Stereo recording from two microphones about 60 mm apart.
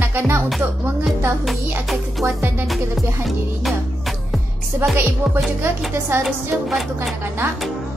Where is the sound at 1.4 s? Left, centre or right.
Centre.